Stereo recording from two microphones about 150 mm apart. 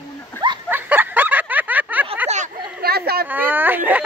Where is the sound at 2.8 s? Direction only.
90° right.